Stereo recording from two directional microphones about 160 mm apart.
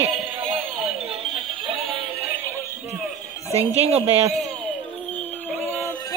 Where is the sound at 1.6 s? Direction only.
35° right (ahead or behind).